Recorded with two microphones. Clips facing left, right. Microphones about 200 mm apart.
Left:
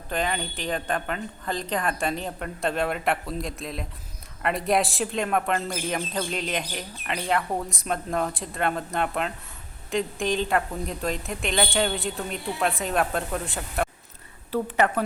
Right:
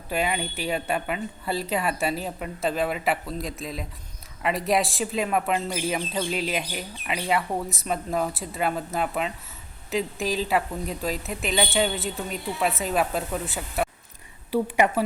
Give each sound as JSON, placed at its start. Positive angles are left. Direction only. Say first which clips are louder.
{"t": 0.1, "sound": "a woman's voice", "louder": "right 1 dB", "side_deg": -10}